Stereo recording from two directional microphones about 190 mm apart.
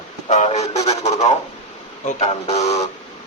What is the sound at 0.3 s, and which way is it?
Speech, 40° left (ahead or behind).